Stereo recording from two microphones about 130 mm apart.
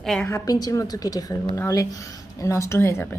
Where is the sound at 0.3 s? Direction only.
25° left (ahead or behind).